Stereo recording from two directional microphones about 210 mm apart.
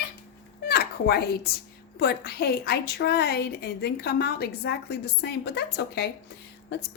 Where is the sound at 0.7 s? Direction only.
45° left (ahead or behind).